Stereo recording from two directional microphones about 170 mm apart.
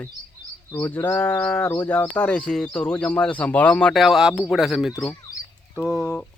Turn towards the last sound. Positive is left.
turn(degrees=5)  # may be behind; listen again after turning